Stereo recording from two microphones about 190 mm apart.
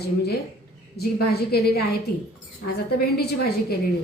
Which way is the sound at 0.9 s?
55° left (ahead or behind).